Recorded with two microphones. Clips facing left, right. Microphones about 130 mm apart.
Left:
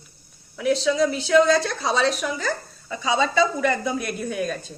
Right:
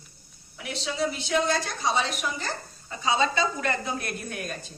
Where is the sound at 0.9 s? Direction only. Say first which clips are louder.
Left 5 dB; 90° left.